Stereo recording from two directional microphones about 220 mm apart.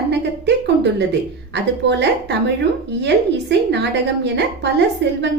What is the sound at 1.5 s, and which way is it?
A woman's voice, 50° right (ahead or behind).